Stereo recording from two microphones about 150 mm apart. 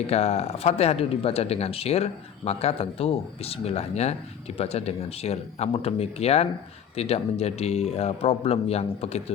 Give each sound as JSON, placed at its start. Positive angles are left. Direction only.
{"t": 0.1, "sound": "speech", "side_deg": 45}